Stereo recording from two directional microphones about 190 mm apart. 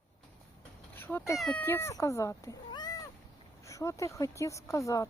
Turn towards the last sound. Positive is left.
turn(degrees=15)  # may be behind; listen again after turning